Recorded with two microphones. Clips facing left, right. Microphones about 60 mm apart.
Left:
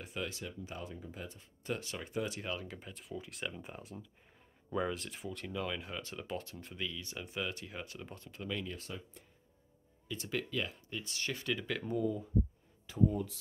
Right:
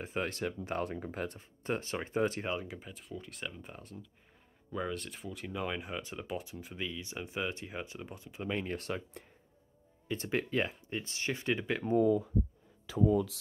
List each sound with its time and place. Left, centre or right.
0.0 s speech: right
0.3 s speech: right
1.6 s speech: right
2.4 s speech: centre
2.8 s speech: centre
5.5 s speech: centre
8.4 s speech: right
8.7 s speech: right
10.0 s speech: right